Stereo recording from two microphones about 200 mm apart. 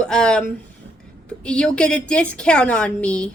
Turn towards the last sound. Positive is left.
turn(degrees=5)  # may be behind; listen again after turning